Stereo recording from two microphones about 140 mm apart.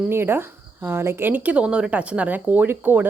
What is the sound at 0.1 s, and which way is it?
A woman's voice, 15° right (ahead or behind).